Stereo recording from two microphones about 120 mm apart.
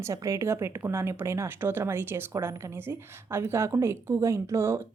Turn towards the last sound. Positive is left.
turn(degrees=-20)  # may be behind; listen again after turning